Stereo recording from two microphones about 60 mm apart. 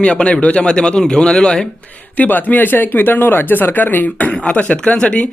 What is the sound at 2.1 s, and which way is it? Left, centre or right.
Speech, left.